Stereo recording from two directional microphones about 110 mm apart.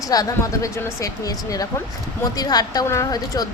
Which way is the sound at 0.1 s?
35° left (ahead or behind).